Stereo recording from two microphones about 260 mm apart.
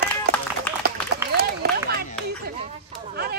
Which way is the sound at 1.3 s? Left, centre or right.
Right.